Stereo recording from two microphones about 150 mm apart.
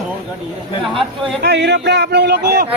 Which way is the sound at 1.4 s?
90° right.